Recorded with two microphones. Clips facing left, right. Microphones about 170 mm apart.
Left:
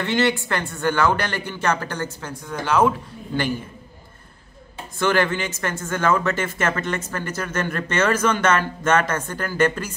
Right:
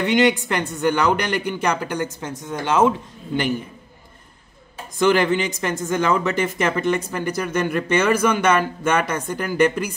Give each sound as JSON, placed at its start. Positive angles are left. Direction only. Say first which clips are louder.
{"t": 0.0, "sound": "speech", "louder": "right 3 dB", "side_deg": -15}
{"t": 4.9, "sound": "speech", "louder": "right 3 dB", "side_deg": -15}